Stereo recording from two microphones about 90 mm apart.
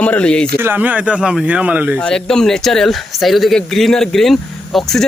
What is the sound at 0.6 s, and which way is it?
Speech, 20° right (ahead or behind).